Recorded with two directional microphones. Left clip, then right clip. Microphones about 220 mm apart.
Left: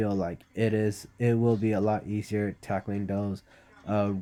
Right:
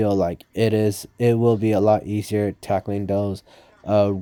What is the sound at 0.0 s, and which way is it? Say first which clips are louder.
Speech: right 10 dB; 40° right (ahead or behind).